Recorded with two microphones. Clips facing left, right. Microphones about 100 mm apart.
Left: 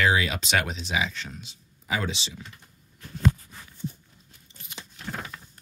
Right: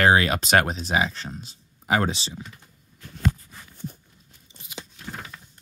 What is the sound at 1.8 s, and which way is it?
Speech, 60° right (ahead or behind).